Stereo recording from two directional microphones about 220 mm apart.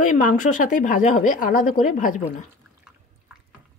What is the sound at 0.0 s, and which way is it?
Speech, 35° left (ahead or behind).